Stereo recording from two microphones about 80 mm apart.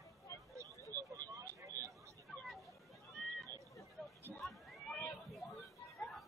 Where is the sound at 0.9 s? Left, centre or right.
Right.